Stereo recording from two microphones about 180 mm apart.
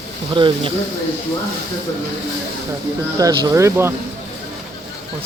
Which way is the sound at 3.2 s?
15° right (ahead or behind).